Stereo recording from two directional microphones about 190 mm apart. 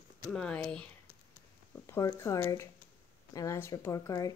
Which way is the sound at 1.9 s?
15° left (ahead or behind).